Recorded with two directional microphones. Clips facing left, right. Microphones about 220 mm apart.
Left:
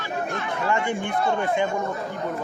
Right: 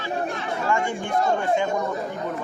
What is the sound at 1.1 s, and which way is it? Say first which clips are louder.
Speech: right 4 dB; 40° right (ahead or behind).